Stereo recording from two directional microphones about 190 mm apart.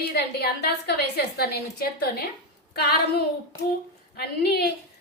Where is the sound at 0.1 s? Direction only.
60° left (ahead or behind).